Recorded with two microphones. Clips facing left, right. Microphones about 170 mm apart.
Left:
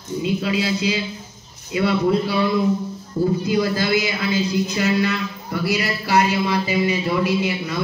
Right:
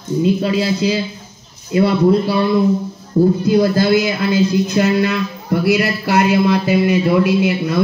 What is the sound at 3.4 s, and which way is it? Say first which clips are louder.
Speech: right 7 dB; 45° right (ahead or behind).